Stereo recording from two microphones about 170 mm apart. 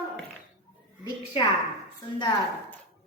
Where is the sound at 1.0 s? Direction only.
30° left (ahead or behind).